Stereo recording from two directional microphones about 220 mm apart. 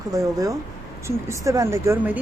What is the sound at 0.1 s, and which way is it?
Speech, 15° right (ahead or behind).